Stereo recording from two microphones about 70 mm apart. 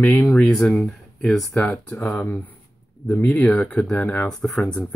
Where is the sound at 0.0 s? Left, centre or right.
Left.